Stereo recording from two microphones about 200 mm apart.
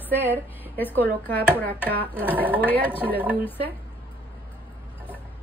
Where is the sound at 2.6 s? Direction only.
10° left (ahead or behind).